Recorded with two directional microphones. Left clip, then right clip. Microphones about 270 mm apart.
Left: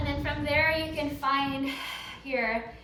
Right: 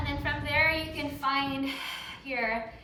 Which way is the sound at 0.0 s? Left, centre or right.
Centre.